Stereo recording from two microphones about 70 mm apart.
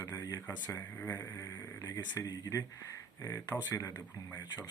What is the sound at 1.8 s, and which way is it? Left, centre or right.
Speech, left.